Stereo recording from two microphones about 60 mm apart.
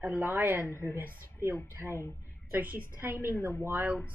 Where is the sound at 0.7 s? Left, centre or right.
Left.